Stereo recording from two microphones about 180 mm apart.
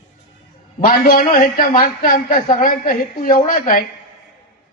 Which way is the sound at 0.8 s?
50° left (ahead or behind).